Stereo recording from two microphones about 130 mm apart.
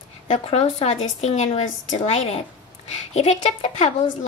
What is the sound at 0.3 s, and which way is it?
A woman's voice, 50° left (ahead or behind).